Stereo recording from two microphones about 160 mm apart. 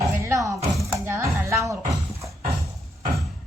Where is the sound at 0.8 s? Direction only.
15° right (ahead or behind).